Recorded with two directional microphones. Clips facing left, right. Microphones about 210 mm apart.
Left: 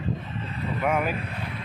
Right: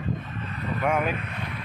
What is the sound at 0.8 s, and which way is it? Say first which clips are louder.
Speech: even; 5° left (ahead or behind).